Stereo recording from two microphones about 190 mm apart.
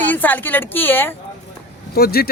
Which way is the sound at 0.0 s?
10° left (ahead or behind).